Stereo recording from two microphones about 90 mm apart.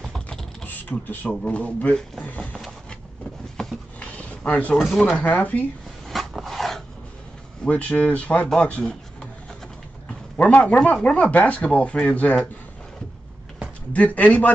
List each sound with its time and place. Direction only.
0.0 s typing: 5° left (ahead or behind)
0.7 s speech: 20° left (ahead or behind)
3.5 s a sound: 10° left (ahead or behind)
4.7 s speech: centre (ahead or behind)
5.1 s speech: 15° left (ahead or behind)
6.0 s a sound: centre (ahead or behind)
7.6 s speech: 15° left (ahead or behind)
10.3 s speech: 15° left (ahead or behind)
13.9 s speech: 15° left (ahead or behind)